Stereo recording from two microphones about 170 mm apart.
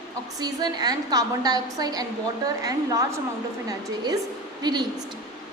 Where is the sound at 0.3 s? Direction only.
25° right (ahead or behind).